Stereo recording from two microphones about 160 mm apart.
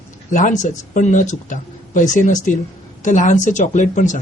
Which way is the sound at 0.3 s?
55° left (ahead or behind).